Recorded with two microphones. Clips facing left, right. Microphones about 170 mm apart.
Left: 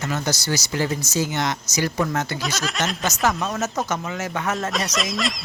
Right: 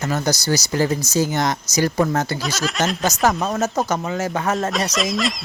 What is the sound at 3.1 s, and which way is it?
Speech, 40° right (ahead or behind).